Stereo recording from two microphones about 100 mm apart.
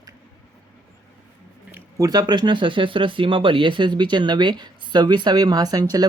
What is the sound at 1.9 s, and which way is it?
Speech, 40° right (ahead or behind).